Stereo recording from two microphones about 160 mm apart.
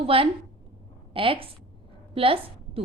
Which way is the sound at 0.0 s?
35° right (ahead or behind).